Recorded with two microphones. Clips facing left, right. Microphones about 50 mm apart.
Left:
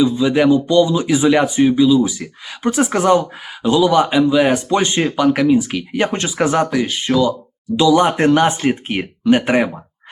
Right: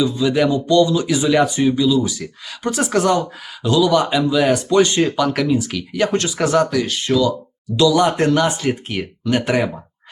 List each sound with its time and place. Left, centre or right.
0.0 s speech: centre